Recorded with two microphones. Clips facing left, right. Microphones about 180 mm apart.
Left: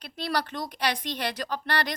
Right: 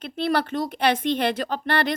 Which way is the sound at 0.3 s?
25° right (ahead or behind).